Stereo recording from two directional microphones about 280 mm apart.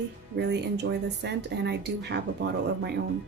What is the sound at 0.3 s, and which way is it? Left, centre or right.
Speech, right.